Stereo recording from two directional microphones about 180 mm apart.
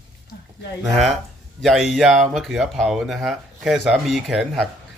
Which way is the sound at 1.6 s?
Centre (ahead or behind).